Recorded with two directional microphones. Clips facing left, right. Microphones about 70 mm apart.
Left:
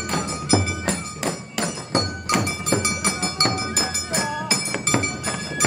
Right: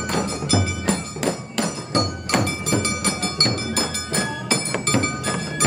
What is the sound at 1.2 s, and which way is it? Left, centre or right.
Hammer, centre.